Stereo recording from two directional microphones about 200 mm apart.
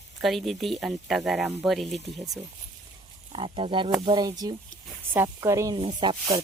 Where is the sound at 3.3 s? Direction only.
25° right (ahead or behind).